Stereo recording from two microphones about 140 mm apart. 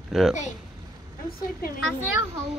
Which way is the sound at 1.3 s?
90° left.